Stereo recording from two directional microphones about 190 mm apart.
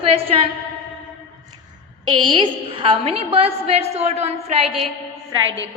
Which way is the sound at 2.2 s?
25° right (ahead or behind).